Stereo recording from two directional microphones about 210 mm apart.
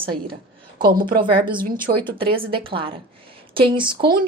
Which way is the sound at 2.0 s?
25° right (ahead or behind).